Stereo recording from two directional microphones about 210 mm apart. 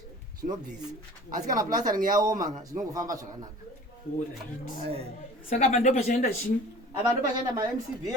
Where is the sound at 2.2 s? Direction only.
20° right (ahead or behind).